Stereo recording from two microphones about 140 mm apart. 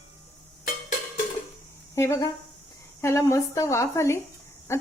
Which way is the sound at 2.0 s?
20° left (ahead or behind).